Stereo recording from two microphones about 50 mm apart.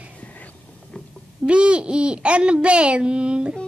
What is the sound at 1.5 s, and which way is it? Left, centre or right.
A child's voice, right.